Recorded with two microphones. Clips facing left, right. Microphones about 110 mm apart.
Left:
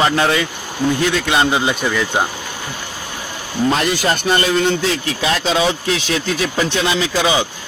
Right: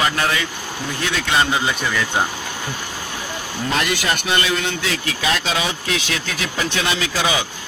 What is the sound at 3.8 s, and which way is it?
Speech, 35° left (ahead or behind).